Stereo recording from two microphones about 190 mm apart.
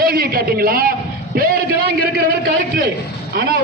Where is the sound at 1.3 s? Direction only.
55° right (ahead or behind).